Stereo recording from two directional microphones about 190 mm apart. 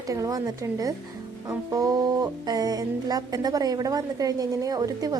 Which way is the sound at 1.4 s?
15° right (ahead or behind).